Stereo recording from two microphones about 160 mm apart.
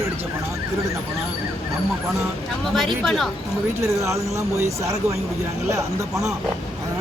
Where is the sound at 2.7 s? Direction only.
Centre (ahead or behind).